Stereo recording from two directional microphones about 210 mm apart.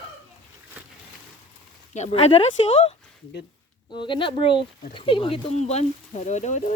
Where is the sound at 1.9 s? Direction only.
30° left (ahead or behind).